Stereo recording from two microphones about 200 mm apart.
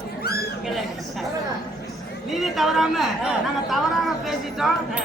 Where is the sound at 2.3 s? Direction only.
Centre (ahead or behind).